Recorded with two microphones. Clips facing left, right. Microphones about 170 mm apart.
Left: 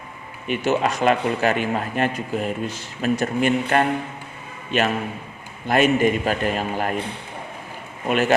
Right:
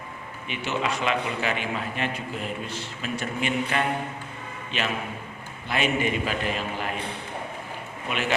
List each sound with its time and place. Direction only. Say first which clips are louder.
0.4 s speech: left 8 dB; 45° left (ahead or behind)
8.0 s speech: left 9 dB; 45° left (ahead or behind)